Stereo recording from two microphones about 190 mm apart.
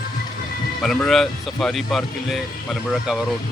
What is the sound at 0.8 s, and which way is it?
Speech, centre (ahead or behind).